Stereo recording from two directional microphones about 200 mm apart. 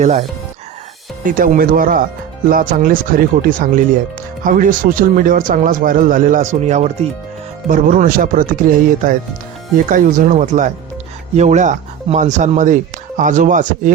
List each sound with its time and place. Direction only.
0.0 s speech: 30° right (ahead or behind)
1.2 s speech: 45° right (ahead or behind)